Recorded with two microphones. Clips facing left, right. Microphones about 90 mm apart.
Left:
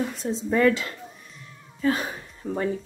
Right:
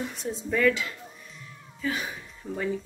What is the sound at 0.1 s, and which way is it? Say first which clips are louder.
A woman's voice: left 4 dB; 35° left (ahead or behind).